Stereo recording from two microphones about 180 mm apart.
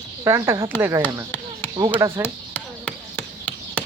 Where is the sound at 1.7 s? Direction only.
25° right (ahead or behind).